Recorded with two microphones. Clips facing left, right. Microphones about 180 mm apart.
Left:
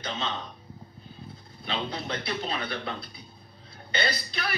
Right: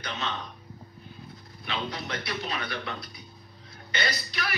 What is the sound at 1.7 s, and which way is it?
A man's voice, 30° left (ahead or behind).